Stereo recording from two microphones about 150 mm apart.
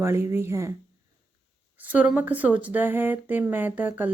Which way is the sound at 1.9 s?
10° right (ahead or behind).